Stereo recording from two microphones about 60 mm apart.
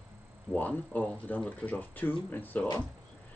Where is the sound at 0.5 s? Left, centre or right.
Left.